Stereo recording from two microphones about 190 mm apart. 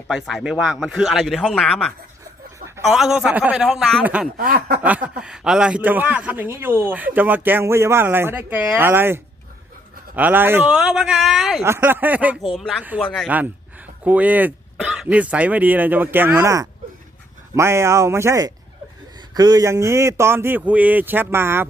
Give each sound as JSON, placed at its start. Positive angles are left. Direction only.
{"t": 0.1, "sound": "speech", "side_deg": 0}
{"t": 4.4, "sound": "a sound", "side_deg": -50}
{"t": 4.8, "sound": "a man's voice", "side_deg": -10}
{"t": 11.6, "sound": "a man's voice", "side_deg": -10}
{"t": 13.2, "sound": "a man's voice", "side_deg": -10}